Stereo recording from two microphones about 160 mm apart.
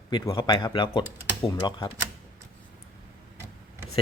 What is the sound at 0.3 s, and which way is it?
Speech, 30° left (ahead or behind).